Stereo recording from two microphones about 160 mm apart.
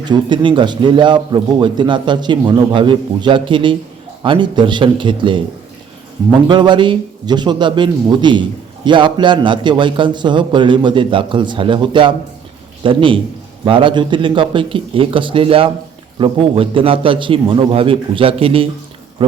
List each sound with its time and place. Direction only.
0.0 s a man's voice: 30° right (ahead or behind)
6.5 s a man's voice: 30° right (ahead or behind)